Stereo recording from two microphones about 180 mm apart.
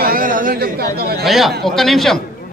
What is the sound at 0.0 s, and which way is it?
Speech, 50° right (ahead or behind).